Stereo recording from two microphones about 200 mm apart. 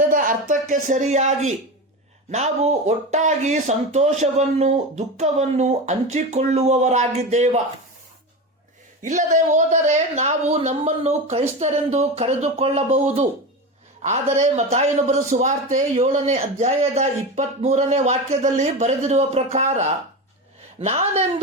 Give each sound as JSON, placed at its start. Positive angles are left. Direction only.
{"t": 0.0, "sound": "speech", "side_deg": -45}
{"t": 9.0, "sound": "speech", "side_deg": -40}